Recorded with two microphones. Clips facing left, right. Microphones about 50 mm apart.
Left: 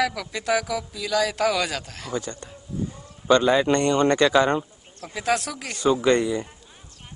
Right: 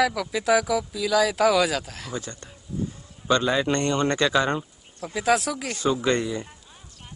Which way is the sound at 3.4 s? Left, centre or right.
Centre.